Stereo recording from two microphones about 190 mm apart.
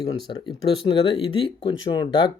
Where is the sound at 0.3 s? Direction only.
25° left (ahead or behind).